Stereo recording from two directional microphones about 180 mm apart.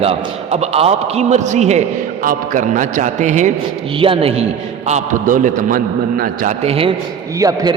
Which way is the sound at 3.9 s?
30° right (ahead or behind).